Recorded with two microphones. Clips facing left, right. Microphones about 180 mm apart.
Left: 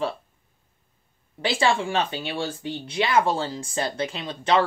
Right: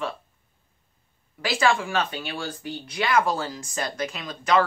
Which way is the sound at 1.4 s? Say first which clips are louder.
Left 1 dB; 30° left (ahead or behind).